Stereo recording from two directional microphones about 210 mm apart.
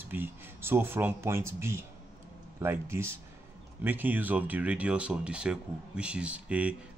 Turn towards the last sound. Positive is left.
turn(degrees=-5)  # may be behind; listen again after turning